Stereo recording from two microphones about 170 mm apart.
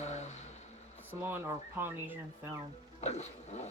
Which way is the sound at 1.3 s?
10° right (ahead or behind).